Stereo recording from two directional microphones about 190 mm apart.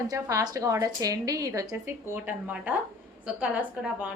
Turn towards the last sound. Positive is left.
turn(degrees=-5)  # may be behind; listen again after turning